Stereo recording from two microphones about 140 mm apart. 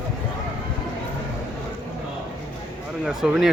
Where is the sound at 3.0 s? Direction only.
5° right (ahead or behind).